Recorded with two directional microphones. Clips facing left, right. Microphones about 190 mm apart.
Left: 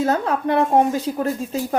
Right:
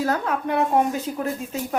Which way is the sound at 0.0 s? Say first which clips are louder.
Left 4 dB; 30° left (ahead or behind).